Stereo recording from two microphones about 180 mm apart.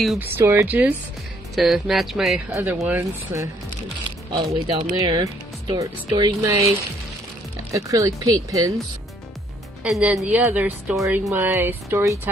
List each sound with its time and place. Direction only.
0.0 s speech: centre (ahead or behind)
0.4 s a woman's voice: 15° right (ahead or behind)
2.5 s a woman's voice: 10° right (ahead or behind)
4.3 s a woman's voice: 25° right (ahead or behind)
7.7 s speech: 20° right (ahead or behind)
9.8 s a woman's voice: 5° right (ahead or behind)